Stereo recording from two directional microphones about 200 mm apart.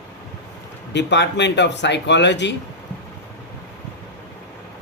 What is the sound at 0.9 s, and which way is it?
Speech, 60° left (ahead or behind).